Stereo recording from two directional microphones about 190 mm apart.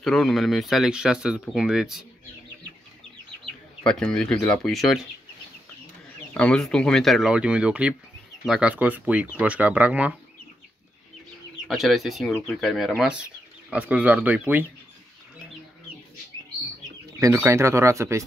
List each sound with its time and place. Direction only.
0.0 s speech: centre (ahead or behind)
3.8 s speech: 5° left (ahead or behind)
6.3 s speech: 5° left (ahead or behind)
11.6 s speech: centre (ahead or behind)
17.2 s speech: 15° right (ahead or behind)